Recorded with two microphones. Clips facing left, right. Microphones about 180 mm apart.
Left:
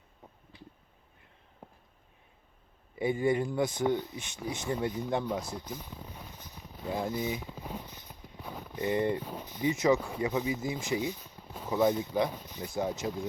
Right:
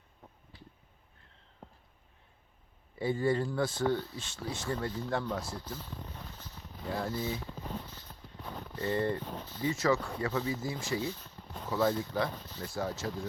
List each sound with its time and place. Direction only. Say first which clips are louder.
1.6 s a sound: left 1 dB; 10° left (ahead or behind)
3.0 s speech: left 2 dB; 15° left (ahead or behind)
11.7 s speech: left 3 dB; 15° left (ahead or behind)